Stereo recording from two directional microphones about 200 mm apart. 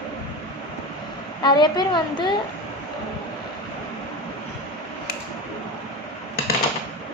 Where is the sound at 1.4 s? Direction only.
20° left (ahead or behind).